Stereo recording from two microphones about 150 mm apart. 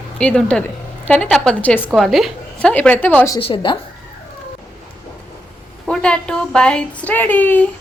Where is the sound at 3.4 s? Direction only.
35° left (ahead or behind).